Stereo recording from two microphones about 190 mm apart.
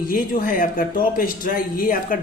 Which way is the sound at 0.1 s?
45° left (ahead or behind).